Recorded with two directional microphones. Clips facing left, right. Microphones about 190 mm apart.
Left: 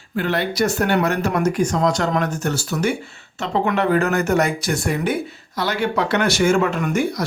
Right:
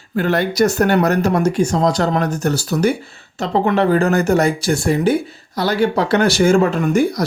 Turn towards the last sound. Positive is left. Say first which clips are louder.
# right 5 dB
turn(degrees=-35)  # may be behind; listen again after turning